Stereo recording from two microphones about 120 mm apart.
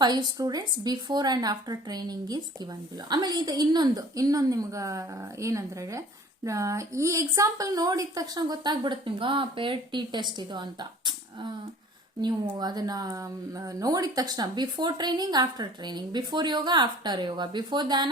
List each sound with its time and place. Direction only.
0.0 s a woman's voice: 35° right (ahead or behind)